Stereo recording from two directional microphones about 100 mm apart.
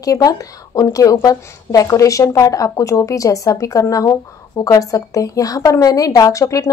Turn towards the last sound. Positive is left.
turn(degrees=35)  # may be behind; listen again after turning